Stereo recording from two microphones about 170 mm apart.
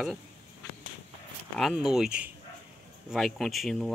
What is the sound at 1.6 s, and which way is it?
Speech, centre (ahead or behind).